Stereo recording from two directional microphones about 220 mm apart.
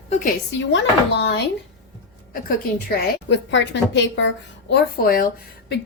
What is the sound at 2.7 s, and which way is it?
A woman's voice, 50° left (ahead or behind).